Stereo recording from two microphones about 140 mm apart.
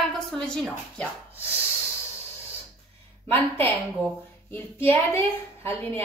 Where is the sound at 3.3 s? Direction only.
15° left (ahead or behind).